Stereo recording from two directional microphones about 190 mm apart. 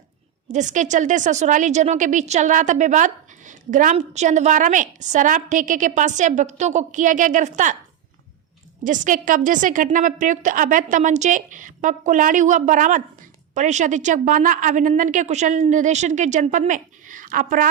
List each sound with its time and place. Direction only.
0.4 s a woman's voice: 40° right (ahead or behind)
8.8 s a woman's voice: 45° right (ahead or behind)